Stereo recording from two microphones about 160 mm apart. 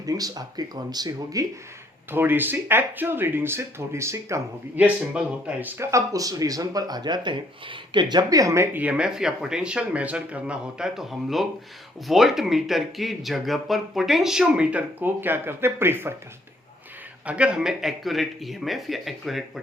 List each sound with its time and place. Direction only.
0.0 s speech: 25° right (ahead or behind)
17.2 s speech: 5° right (ahead or behind)